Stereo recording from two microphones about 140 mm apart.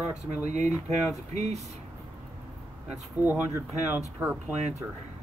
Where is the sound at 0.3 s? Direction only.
55° right (ahead or behind).